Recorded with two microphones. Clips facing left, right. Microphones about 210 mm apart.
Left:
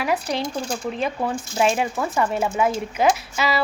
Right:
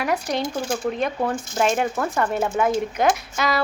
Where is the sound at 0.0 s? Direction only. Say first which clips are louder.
Even; centre (ahead or behind).